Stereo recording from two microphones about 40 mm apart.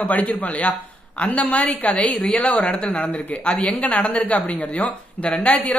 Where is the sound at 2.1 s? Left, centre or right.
Centre.